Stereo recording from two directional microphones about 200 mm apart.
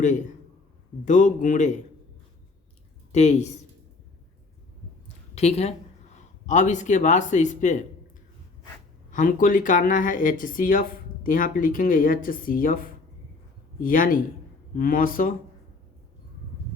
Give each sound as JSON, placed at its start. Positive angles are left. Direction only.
{"t": 1.0, "sound": "speech", "side_deg": 40}
{"t": 3.1, "sound": "speech", "side_deg": 35}
{"t": 5.3, "sound": "a woman's voice", "side_deg": 35}
{"t": 9.0, "sound": "speech", "side_deg": 40}
{"t": 13.8, "sound": "speech", "side_deg": 45}